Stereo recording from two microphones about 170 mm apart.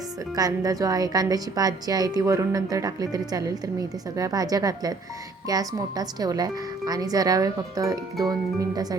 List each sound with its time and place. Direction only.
0.3 s a woman's voice: 20° right (ahead or behind)